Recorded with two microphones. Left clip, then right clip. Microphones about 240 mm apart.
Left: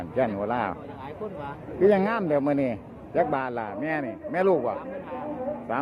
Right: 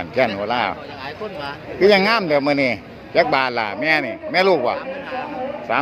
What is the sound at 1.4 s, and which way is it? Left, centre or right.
A man's voice, centre.